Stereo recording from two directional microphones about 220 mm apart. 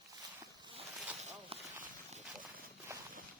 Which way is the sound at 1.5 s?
25° right (ahead or behind).